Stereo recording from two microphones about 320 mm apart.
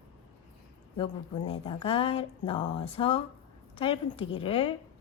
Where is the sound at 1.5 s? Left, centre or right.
Centre.